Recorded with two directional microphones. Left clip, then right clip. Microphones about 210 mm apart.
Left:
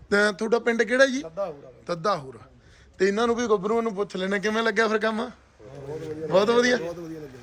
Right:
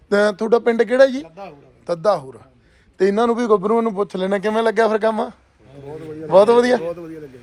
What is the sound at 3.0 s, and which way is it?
A man's voice, 15° right (ahead or behind).